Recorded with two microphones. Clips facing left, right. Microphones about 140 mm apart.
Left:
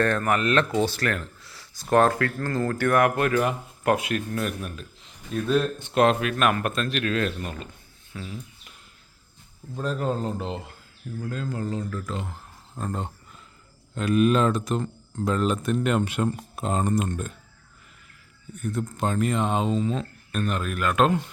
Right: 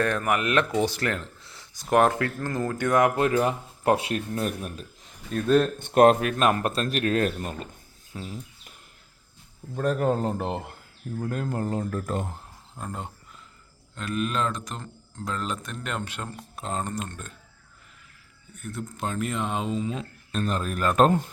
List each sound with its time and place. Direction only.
0.0 s a man's voice: 10° right (ahead or behind); by 5.1 s 35° right (ahead or behind)
5.3 s speech: 55° right (ahead or behind)
6.3 s speech: 30° right (ahead or behind)
8.1 s bird: 30° right (ahead or behind)
9.7 s speech: 55° right (ahead or behind)
12.8 s speech: 5° right (ahead or behind)
13.9 s speech: 5° left (ahead or behind)
18.5 s speech: centre (ahead or behind)
20.3 s speech: 35° right (ahead or behind)